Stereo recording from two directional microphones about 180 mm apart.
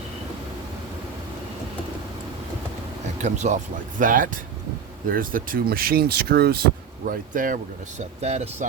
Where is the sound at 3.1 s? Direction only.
40° right (ahead or behind); by 6.6 s 60° right (ahead or behind).